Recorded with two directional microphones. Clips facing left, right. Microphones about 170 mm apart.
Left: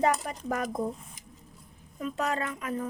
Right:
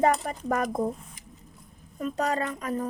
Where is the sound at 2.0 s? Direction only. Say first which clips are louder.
Right 3 dB; 35° right (ahead or behind).